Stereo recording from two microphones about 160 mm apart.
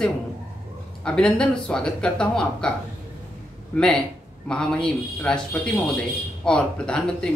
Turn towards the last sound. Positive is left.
turn(degrees=5)  # may be behind; listen again after turning